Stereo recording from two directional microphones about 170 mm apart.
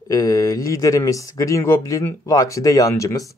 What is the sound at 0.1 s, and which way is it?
Speech, 20° left (ahead or behind).